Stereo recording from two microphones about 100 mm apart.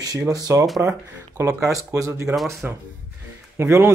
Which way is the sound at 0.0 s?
35° right (ahead or behind).